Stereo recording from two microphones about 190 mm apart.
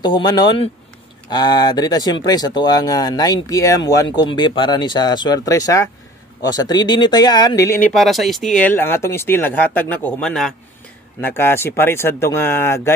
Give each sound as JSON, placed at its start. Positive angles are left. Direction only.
{"t": 0.0, "sound": "speech", "side_deg": 25}
{"t": 7.9, "sound": "speech", "side_deg": 0}